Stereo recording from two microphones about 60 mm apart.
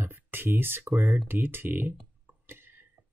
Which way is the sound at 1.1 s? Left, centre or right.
Right.